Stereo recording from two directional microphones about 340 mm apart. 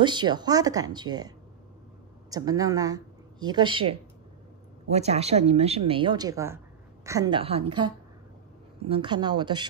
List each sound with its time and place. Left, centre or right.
0.0 s a woman's voice: centre
2.3 s a woman's voice: centre